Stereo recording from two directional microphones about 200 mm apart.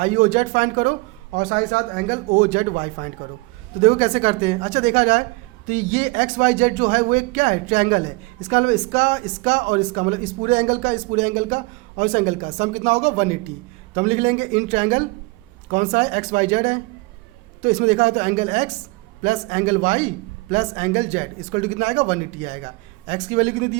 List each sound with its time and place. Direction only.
0.0 s speech: 40° right (ahead or behind)
2.0 s speech: 35° right (ahead or behind)